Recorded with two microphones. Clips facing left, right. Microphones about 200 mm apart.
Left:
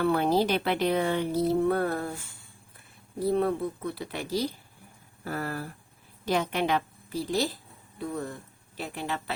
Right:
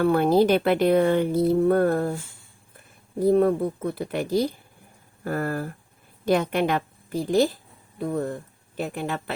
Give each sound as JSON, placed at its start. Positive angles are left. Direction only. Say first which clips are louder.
{"t": 0.0, "sound": "speech", "louder": "right 5 dB", "side_deg": -50}
{"t": 3.2, "sound": "a woman's voice", "louder": "right 7 dB", "side_deg": -45}